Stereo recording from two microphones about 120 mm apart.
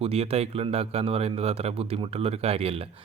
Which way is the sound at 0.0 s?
55° right (ahead or behind).